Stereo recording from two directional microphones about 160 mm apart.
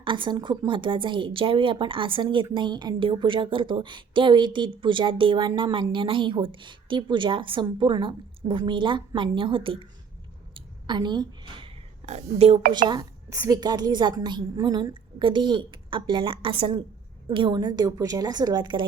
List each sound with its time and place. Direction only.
0.0 s speech: 30° right (ahead or behind)
10.5 s a sound: 25° right (ahead or behind)
12.4 s speech: 40° right (ahead or behind)
12.9 s a woman's voice: 20° right (ahead or behind)